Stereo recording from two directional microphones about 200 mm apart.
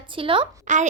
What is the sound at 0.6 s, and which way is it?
Speech, 40° right (ahead or behind).